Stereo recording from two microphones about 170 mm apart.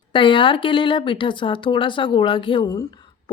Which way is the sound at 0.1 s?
30° left (ahead or behind).